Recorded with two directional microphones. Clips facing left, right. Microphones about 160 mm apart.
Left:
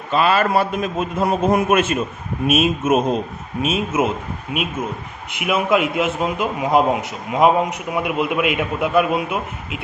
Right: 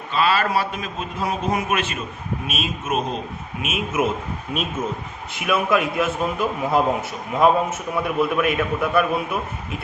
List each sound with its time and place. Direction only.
0.1 s a man's voice: 45° left (ahead or behind)
3.6 s a man's voice: 30° left (ahead or behind)
4.5 s speech: 10° left (ahead or behind)
5.3 s a man's voice: 20° left (ahead or behind)